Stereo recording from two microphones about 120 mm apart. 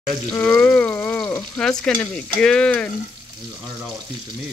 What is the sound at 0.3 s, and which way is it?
Frying, 15° left (ahead or behind).